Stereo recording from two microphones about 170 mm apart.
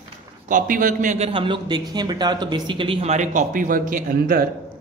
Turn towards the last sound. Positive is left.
turn(degrees=-55)  # may be behind; listen again after turning